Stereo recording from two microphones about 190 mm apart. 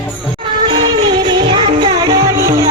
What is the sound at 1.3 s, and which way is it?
Music, 25° right (ahead or behind).